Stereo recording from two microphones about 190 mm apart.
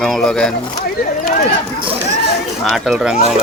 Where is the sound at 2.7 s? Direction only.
Centre (ahead or behind).